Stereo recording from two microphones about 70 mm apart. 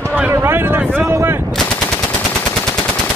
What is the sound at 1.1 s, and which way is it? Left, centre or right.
Artillery fire, right.